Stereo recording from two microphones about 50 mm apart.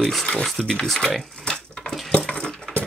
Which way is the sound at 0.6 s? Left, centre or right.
Centre.